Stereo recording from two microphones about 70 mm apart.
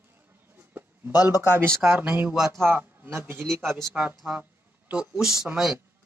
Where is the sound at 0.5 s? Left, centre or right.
Right.